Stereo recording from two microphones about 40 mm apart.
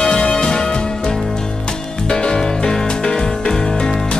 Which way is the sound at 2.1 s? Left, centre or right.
Left.